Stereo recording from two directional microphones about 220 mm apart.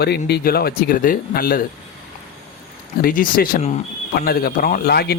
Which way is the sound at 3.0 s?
40° left (ahead or behind).